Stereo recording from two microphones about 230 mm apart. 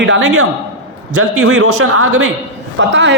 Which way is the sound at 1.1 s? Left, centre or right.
Right.